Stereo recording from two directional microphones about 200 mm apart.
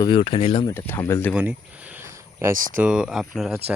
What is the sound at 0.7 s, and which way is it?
Speech, 10° left (ahead or behind).